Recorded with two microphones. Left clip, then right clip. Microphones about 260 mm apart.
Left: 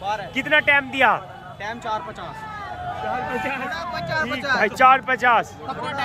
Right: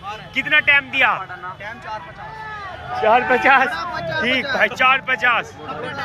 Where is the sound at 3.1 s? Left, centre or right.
Right.